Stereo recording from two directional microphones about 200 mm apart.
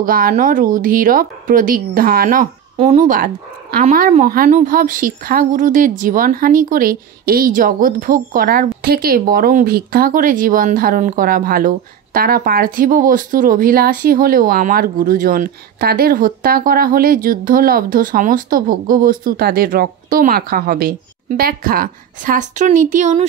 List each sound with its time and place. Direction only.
0.0 s a woman's voice: 45° right (ahead or behind)
2.8 s a woman's voice: 35° right (ahead or behind)